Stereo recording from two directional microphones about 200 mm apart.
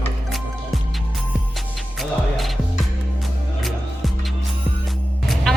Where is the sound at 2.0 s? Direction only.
Centre (ahead or behind).